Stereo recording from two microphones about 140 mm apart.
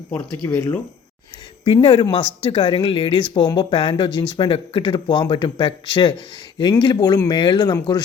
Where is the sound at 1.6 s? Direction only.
40° left (ahead or behind).